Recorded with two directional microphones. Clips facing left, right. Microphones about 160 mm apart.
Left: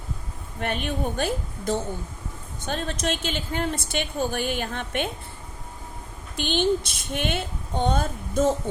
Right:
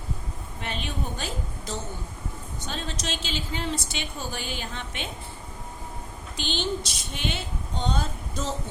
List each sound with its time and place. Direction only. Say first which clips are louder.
0.6 s a woman's voice: left 6 dB; 55° left (ahead or behind)
6.3 s a woman's voice: left 7 dB; 55° left (ahead or behind)